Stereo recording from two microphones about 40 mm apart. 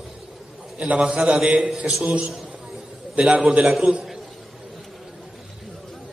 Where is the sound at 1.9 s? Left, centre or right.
Centre.